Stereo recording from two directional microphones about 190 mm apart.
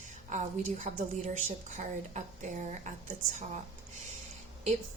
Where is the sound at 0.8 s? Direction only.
40° right (ahead or behind).